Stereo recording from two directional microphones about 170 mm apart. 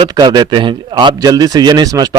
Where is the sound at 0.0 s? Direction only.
25° right (ahead or behind).